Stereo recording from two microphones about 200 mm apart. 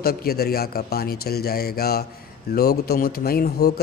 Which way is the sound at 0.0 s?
50° left (ahead or behind).